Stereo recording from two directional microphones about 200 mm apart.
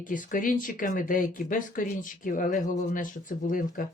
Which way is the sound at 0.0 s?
40° left (ahead or behind).